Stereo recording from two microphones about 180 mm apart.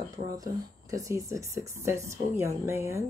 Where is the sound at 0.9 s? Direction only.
15° right (ahead or behind).